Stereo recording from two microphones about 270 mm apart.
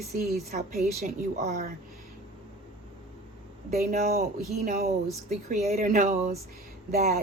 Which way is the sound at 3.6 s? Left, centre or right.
Right.